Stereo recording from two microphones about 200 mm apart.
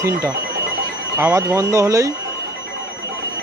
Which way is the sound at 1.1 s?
10° right (ahead or behind).